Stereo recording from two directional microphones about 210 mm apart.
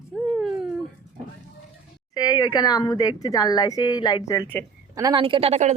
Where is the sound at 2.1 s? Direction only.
20° left (ahead or behind).